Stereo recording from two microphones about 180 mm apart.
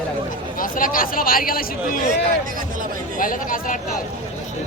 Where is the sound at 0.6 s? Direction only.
50° left (ahead or behind).